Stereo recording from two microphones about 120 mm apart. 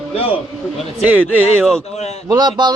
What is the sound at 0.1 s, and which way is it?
Speech, 55° left (ahead or behind).